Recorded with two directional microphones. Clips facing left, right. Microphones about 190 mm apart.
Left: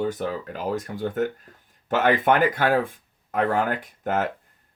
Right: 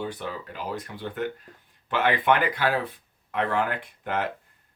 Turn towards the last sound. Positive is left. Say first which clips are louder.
# left 4 dB
turn(degrees=45)  # may be behind; listen again after turning